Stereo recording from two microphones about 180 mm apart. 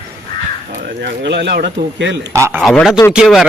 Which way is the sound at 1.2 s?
70° right (ahead or behind).